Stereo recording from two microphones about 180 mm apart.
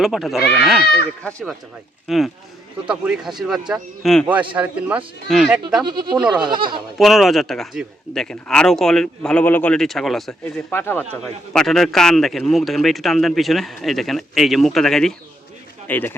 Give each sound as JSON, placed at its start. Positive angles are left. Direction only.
{"t": 0.0, "sound": "a man's voice", "side_deg": 0}
{"t": 2.0, "sound": "a man's voice", "side_deg": 0}
{"t": 4.3, "sound": "speech", "side_deg": -10}
{"t": 5.8, "sound": "speech", "side_deg": -25}
{"t": 7.0, "sound": "a man's voice", "side_deg": 0}
{"t": 10.4, "sound": "a man's voice", "side_deg": 10}